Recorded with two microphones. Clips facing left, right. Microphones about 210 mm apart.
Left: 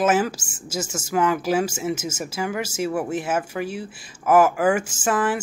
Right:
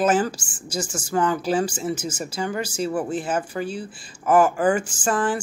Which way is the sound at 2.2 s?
5° left (ahead or behind).